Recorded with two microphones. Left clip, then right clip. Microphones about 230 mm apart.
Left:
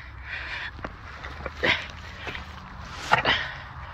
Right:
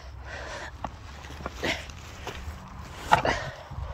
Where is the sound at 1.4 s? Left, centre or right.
Centre.